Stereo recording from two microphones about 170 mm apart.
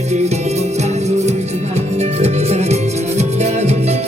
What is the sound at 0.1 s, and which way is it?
Music, 40° right (ahead or behind).